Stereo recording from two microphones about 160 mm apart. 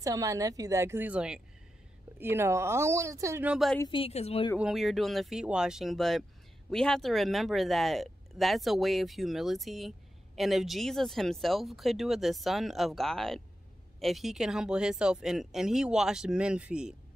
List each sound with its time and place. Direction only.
0.0 s a woman's voice: 20° right (ahead or behind)
3.5 s speech: centre (ahead or behind)
3.8 s a woman's voice: 35° left (ahead or behind)
4.6 s speech: centre (ahead or behind)